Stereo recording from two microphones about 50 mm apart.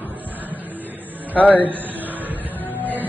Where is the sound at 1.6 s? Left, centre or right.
Right.